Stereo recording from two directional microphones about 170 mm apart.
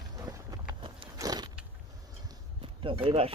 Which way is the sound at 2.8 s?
30° right (ahead or behind).